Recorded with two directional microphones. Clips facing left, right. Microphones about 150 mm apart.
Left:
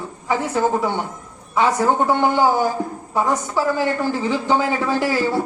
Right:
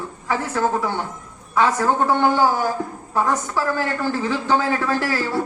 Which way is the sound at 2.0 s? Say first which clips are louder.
Left 1 dB; 15° left (ahead or behind).